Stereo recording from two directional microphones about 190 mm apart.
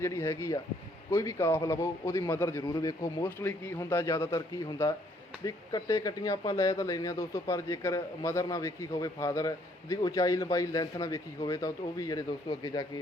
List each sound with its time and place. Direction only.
0.0 s speech: 15° left (ahead or behind)